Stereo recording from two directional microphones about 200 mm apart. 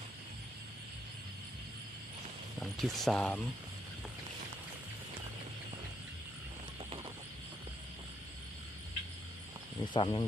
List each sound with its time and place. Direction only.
2.6 s speech: centre (ahead or behind)
9.8 s speech: 25° left (ahead or behind)